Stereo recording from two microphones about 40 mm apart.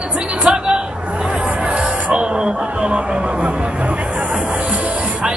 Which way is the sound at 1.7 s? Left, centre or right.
Right.